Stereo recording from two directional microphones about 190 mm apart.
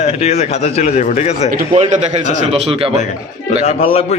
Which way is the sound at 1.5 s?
40° right (ahead or behind).